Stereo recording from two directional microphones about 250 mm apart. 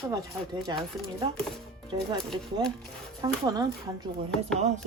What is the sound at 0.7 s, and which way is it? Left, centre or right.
Speech, centre.